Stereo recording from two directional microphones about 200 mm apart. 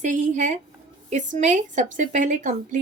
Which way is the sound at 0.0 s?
40° right (ahead or behind).